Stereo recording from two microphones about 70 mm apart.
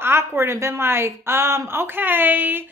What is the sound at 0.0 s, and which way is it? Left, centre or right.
A woman's voice, right.